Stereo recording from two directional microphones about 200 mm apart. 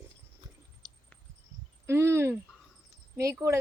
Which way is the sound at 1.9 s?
10° right (ahead or behind).